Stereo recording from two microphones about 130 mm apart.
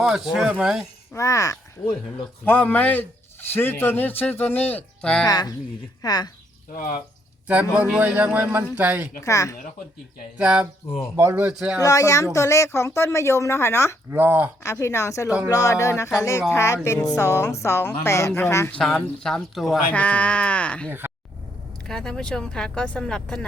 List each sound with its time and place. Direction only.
0.0 s speech: centre (ahead or behind)
1.1 s speech: 25° left (ahead or behind)
2.4 s a man's voice: 10° left (ahead or behind)
5.2 s speech: 30° left (ahead or behind)
6.7 s speech: 90° left
7.4 s a man's voice: 10° right (ahead or behind)
9.2 s speech: 25° left (ahead or behind)
10.3 s a man's voice: 10° right (ahead or behind)
11.8 s speech: 25° left (ahead or behind)
14.1 s a man's voice: 15° right (ahead or behind)
14.6 s speech: 20° left (ahead or behind)
15.3 s a man's voice: 10° right (ahead or behind)
15.5 s speech: 25° left (ahead or behind)
18.8 s a man's voice: 5° left (ahead or behind)